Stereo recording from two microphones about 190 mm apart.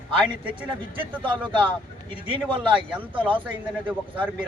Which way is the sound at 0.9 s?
25° right (ahead or behind).